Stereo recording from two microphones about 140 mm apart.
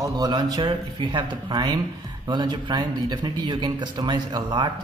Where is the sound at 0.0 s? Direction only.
25° right (ahead or behind).